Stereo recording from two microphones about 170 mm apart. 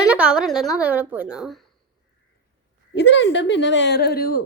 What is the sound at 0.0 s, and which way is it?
A woman's voice, 5° right (ahead or behind).